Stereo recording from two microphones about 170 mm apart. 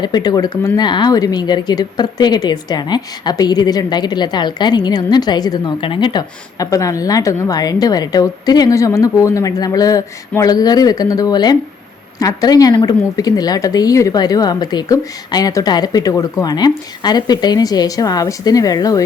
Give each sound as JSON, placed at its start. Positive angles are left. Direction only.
{"t": 0.0, "sound": "speech", "side_deg": 25}